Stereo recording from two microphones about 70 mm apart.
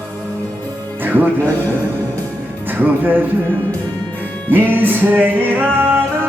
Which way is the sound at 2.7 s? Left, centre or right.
Right.